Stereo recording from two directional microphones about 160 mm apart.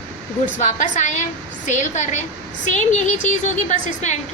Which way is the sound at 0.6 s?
50° left (ahead or behind).